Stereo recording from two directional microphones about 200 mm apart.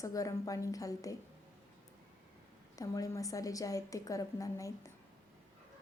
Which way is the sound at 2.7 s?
15° left (ahead or behind).